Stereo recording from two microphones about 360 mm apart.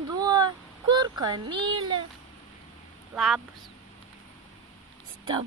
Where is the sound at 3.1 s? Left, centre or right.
Centre.